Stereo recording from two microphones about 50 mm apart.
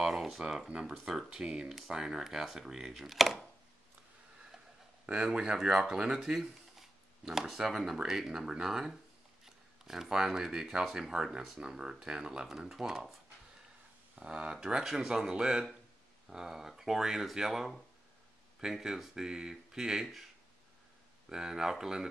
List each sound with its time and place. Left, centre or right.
0.1 s a sound: centre
0.4 s speech: centre
5.0 s speech: centre
5.6 s speech: centre
11.6 s speech: centre
14.2 s speech: centre
21.3 s speech: centre